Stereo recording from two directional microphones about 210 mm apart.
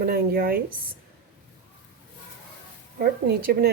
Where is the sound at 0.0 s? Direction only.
45° right (ahead or behind).